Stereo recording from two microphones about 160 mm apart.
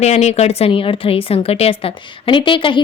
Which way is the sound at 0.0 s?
45° left (ahead or behind).